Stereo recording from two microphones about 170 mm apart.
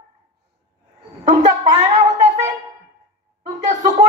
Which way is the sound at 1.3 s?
40° right (ahead or behind).